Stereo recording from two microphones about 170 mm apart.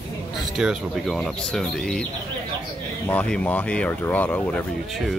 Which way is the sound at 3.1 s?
10° left (ahead or behind).